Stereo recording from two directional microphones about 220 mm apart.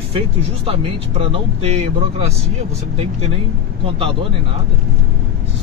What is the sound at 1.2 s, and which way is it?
Speech, 25° right (ahead or behind).